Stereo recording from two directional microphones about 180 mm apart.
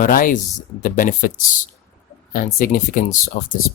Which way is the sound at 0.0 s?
50° left (ahead or behind).